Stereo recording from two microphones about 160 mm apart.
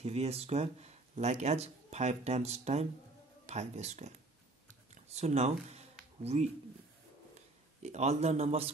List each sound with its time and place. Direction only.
0.0 s speech: 40° right (ahead or behind)
5.1 s a man's voice: 40° right (ahead or behind)
7.8 s a man's voice: 45° right (ahead or behind)